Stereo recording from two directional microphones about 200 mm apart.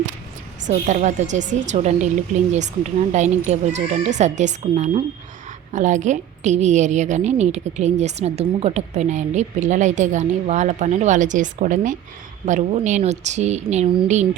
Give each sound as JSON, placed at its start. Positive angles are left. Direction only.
{"t": 0.7, "sound": "a woman's voice", "side_deg": -35}